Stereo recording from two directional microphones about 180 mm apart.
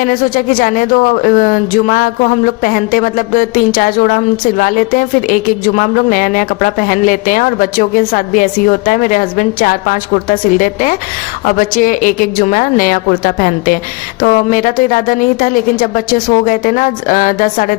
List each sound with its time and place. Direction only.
0.0 s a woman's voice: 50° left (ahead or behind)